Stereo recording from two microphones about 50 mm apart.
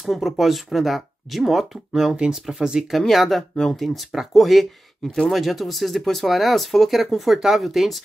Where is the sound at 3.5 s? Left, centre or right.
Centre.